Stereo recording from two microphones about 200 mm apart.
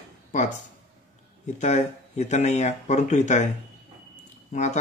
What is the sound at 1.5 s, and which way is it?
Speech, 35° left (ahead or behind).